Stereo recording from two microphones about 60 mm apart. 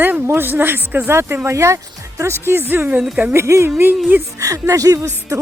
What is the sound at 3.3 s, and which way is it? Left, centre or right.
Speech, right.